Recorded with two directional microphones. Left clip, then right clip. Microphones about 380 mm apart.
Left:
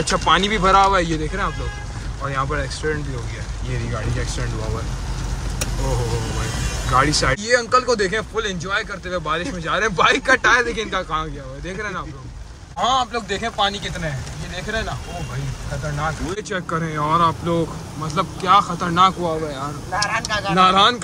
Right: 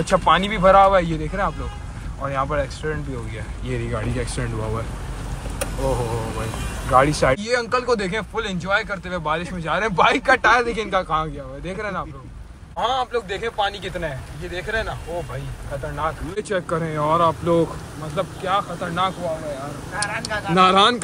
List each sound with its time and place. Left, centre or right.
0.0 s a man's voice: centre
6.9 s a man's voice: centre
16.3 s a man's voice: centre
20.0 s speech: centre